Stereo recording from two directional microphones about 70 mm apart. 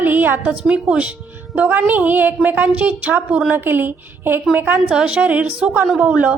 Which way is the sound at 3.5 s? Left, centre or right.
Right.